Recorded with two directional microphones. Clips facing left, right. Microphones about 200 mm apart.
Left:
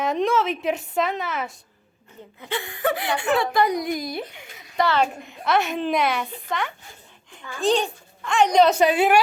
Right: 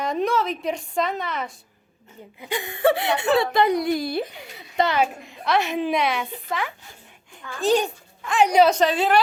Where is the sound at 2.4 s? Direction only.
15° right (ahead or behind); by 4.8 s 30° right (ahead or behind).